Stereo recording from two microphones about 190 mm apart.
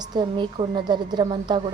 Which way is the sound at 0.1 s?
25° right (ahead or behind).